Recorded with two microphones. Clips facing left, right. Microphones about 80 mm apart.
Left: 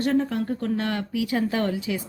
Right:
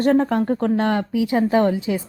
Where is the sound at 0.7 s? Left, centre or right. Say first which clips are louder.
Right 7 dB; right.